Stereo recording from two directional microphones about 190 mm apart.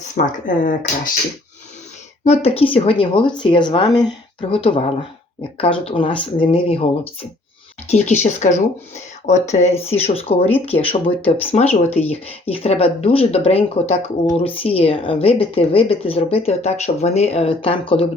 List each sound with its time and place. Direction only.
0.2 s speech: 45° left (ahead or behind)
2.2 s speech: 35° left (ahead or behind)